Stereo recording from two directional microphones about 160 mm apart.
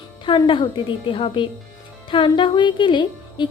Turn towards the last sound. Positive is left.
turn(degrees=30)  # may be behind; listen again after turning